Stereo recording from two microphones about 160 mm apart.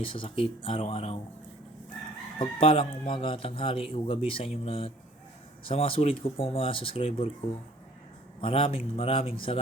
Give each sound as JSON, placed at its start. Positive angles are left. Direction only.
{"t": 0.0, "sound": "speech", "side_deg": 35}
{"t": 2.4, "sound": "speech", "side_deg": 35}
{"t": 8.4, "sound": "speech", "side_deg": 35}